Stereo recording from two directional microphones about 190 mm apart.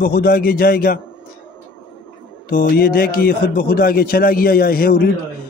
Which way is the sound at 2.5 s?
50° left (ahead or behind).